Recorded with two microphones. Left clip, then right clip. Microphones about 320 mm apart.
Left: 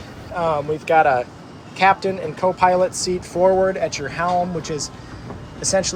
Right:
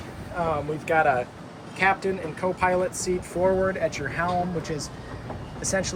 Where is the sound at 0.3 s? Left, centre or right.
Centre.